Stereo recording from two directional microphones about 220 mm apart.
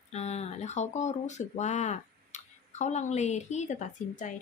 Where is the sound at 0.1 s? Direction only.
30° left (ahead or behind).